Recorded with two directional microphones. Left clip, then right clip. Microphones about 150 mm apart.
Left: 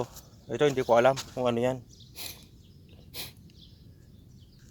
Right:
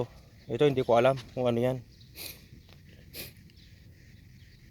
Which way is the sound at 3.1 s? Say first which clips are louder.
Left 4 dB; 75° right (ahead or behind).